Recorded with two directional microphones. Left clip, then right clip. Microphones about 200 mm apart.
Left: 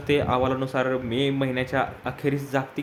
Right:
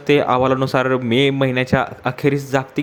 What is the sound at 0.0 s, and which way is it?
Speech, 35° right (ahead or behind).